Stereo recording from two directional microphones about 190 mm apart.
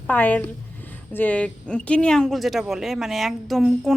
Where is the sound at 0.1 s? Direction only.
10° left (ahead or behind).